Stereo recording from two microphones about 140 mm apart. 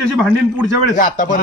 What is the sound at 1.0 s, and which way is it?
Speech, 75° left (ahead or behind).